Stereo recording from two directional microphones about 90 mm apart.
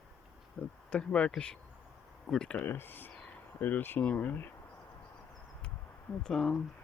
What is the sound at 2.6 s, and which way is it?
Speech, 25° left (ahead or behind).